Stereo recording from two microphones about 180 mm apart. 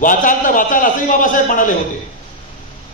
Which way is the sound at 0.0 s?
45° left (ahead or behind).